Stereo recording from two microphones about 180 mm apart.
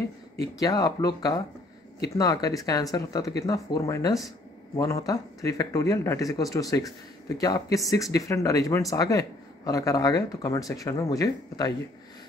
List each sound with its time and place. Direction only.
0.6 s speech: 20° left (ahead or behind)